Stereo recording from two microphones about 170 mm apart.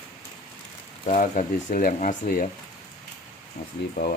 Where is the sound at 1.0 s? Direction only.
45° left (ahead or behind).